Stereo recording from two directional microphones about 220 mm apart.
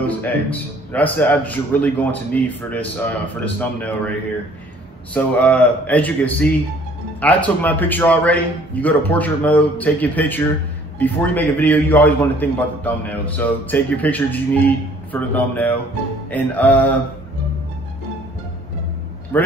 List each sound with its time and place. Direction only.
0.0 s a man's voice: 5° left (ahead or behind)
5.1 s a man's voice: 5° left (ahead or behind)
19.3 s a man's voice: 10° left (ahead or behind)